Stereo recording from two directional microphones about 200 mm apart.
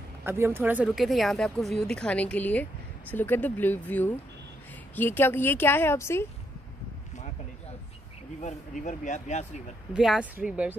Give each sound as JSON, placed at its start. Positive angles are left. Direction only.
{"t": 0.2, "sound": "a woman's voice", "side_deg": -10}
{"t": 8.4, "sound": "speech", "side_deg": 35}
{"t": 9.9, "sound": "speech", "side_deg": -5}